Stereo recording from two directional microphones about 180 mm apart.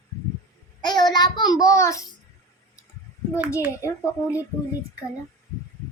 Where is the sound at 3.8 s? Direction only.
15° left (ahead or behind).